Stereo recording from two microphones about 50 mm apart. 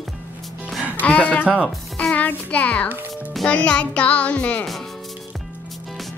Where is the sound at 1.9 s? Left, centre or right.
Left.